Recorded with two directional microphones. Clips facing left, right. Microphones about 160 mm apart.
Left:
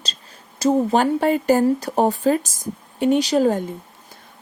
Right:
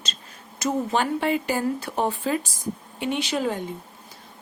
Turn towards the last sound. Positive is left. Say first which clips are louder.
# left 8 dB
turn(degrees=40)  # may be behind; listen again after turning